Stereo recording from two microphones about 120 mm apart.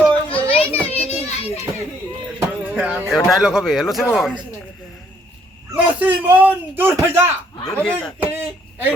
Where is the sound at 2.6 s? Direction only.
10° right (ahead or behind).